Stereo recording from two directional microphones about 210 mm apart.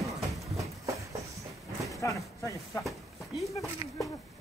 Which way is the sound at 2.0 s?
15° left (ahead or behind).